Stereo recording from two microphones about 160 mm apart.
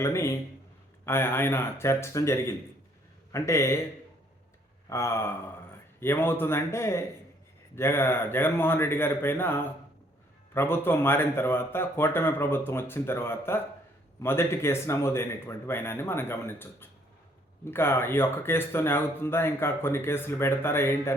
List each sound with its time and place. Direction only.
0.0 s speech: 20° left (ahead or behind)
4.9 s speech: 15° left (ahead or behind)